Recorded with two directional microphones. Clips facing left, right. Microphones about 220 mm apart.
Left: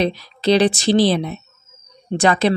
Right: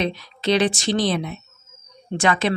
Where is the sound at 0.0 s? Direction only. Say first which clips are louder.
Left 5 dB; 35° left (ahead or behind).